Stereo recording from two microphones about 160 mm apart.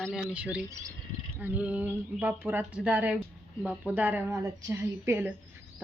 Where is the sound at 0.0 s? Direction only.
Centre (ahead or behind).